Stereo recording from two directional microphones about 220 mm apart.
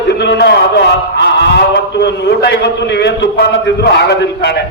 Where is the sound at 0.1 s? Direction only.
50° left (ahead or behind).